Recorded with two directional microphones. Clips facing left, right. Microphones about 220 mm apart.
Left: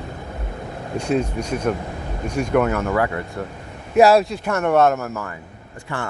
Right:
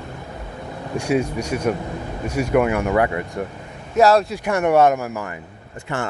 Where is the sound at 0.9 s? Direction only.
10° right (ahead or behind).